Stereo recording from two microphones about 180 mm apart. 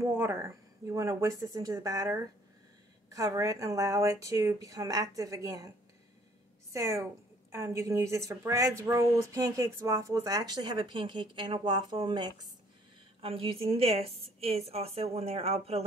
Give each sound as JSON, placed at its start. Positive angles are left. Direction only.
{"t": 0.0, "sound": "a woman's voice", "side_deg": -15}
{"t": 6.7, "sound": "a woman's voice", "side_deg": -15}